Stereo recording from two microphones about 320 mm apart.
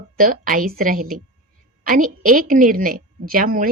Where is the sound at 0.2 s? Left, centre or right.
Right.